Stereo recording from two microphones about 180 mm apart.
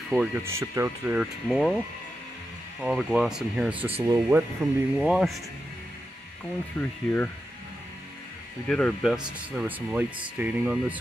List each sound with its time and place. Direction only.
0.1 s speech: 5° right (ahead or behind)
2.8 s speech: centre (ahead or behind)
4.9 s speech: 5° right (ahead or behind)
6.8 s speech: 10° left (ahead or behind)
8.6 s speech: 5° left (ahead or behind)